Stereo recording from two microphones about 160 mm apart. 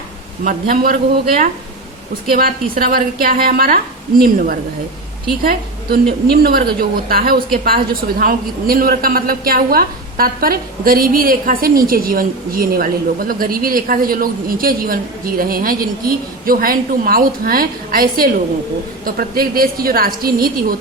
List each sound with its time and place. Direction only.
0.4 s a woman's voice: 65° right (ahead or behind)